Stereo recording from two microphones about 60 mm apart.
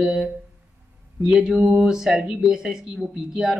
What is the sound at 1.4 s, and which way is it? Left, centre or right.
A woman's voice, centre.